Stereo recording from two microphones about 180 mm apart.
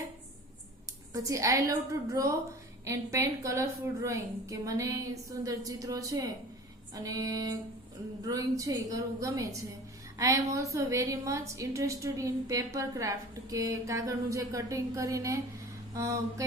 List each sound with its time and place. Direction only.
1.1 s a woman's voice: 15° right (ahead or behind)